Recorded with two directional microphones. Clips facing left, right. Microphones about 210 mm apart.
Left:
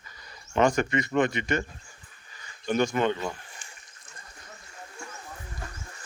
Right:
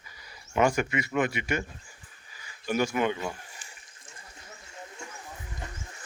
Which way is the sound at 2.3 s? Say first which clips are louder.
Left 2 dB; 5° right (ahead or behind).